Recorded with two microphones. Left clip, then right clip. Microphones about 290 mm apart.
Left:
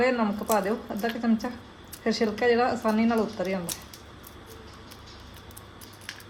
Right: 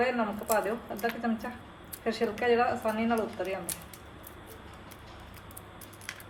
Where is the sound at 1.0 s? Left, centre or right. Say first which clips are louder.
Left 3 dB; left.